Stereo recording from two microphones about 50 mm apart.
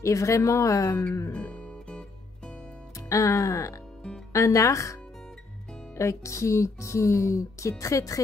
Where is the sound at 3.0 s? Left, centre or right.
Left.